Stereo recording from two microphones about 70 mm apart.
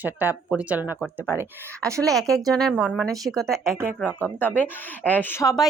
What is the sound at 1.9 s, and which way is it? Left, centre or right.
Speech, right.